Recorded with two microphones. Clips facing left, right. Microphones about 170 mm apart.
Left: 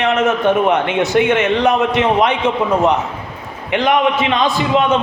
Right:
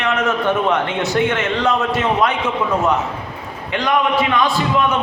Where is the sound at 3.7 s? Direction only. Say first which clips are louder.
Left 3 dB; 20° left (ahead or behind).